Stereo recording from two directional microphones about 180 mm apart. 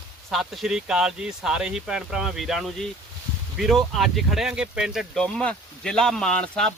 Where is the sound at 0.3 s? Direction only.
Centre (ahead or behind).